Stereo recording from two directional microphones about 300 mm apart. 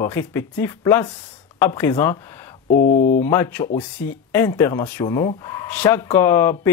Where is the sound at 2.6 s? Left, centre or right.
Left.